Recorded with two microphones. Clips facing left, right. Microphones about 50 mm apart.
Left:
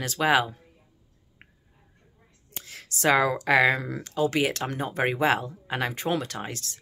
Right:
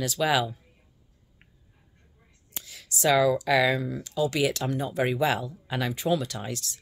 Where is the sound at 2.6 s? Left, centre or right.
Left.